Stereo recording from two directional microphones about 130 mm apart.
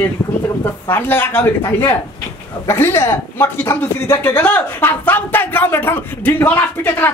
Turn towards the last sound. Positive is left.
turn(degrees=15)  # may be behind; listen again after turning